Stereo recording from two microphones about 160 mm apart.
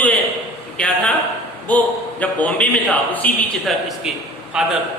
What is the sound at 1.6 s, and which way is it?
A man's voice, 10° left (ahead or behind).